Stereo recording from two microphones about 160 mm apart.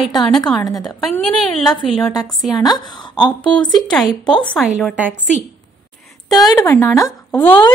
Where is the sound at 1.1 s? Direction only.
5° left (ahead or behind).